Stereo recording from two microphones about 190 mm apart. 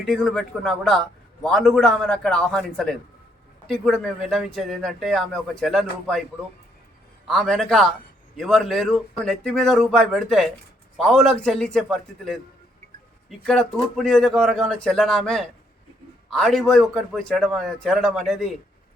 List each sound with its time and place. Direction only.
0.0 s a man's voice: 5° left (ahead or behind)
7.3 s a man's voice: centre (ahead or behind)